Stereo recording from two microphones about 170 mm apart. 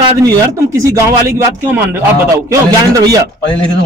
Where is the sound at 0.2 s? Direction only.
20° right (ahead or behind).